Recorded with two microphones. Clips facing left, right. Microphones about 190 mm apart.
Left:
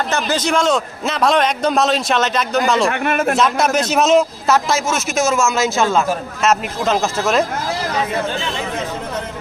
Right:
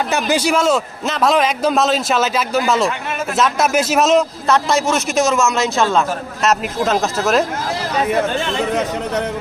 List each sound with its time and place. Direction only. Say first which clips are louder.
0.1 s a man's voice: right 3 dB; 10° right (ahead or behind)
2.9 s a man's voice: left 6 dB; 60° left (ahead or behind)
3.3 s a man's voice: even; centre (ahead or behind)